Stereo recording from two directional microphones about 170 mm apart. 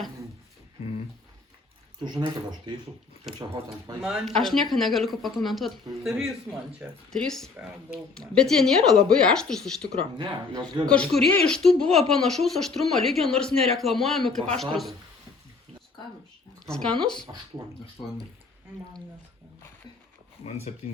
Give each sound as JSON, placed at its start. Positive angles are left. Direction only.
{"t": 2.0, "sound": "speech", "side_deg": -25}
{"t": 3.3, "sound": "speech", "side_deg": -25}
{"t": 4.4, "sound": "speech", "side_deg": 0}
{"t": 7.5, "sound": "speech", "side_deg": -10}
{"t": 8.2, "sound": "speech", "side_deg": 5}
{"t": 10.0, "sound": "speech", "side_deg": -30}
{"t": 10.8, "sound": "speech", "side_deg": 5}
{"t": 16.6, "sound": "speech", "side_deg": 5}
{"t": 17.6, "sound": "speech", "side_deg": -20}
{"t": 20.7, "sound": "speech", "side_deg": 40}